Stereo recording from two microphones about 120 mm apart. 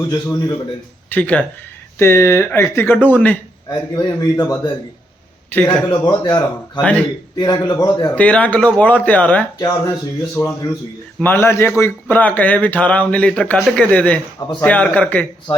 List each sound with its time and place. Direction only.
0.1 s speech: 30° left (ahead or behind)
1.1 s speech: 10° left (ahead or behind)
3.7 s a man's voice: 35° left (ahead or behind)
6.1 s a man's voice: 35° left (ahead or behind)
8.1 s speech: 10° left (ahead or behind)
9.6 s a man's voice: 30° left (ahead or behind); by 14.2 s 10° left (ahead or behind)
14.3 s a man's voice: 35° left (ahead or behind)
14.6 s speech: 10° left (ahead or behind)